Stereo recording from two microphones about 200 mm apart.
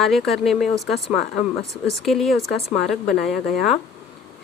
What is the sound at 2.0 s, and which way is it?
Speech, centre (ahead or behind).